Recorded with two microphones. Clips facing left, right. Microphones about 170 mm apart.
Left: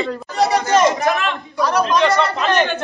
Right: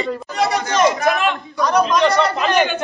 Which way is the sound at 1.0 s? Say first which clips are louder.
Right 1 dB; centre (ahead or behind).